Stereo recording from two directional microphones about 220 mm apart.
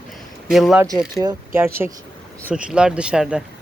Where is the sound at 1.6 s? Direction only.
10° right (ahead or behind).